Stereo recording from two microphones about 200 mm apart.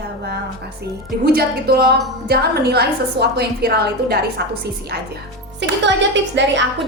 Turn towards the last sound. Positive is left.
turn(degrees=-65)  # may be behind; listen again after turning